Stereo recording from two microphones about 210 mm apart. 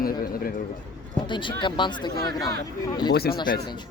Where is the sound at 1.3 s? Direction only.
25° left (ahead or behind).